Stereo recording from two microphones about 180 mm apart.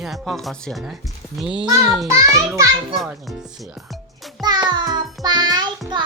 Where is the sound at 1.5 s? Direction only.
25° right (ahead or behind).